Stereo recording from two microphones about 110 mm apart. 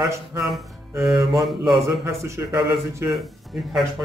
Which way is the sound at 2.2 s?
25° right (ahead or behind).